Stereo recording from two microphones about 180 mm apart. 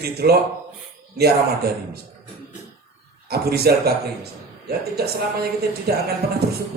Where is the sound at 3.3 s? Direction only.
60° right (ahead or behind).